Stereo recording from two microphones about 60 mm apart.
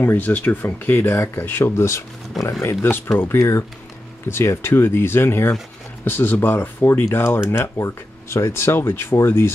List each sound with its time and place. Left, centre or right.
0.0 s speech: left
3.3 s speech: left
7.7 s speech: left